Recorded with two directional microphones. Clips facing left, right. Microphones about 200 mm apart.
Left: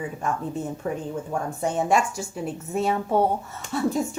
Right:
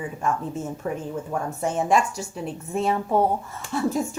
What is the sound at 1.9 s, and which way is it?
Speech, 45° left (ahead or behind).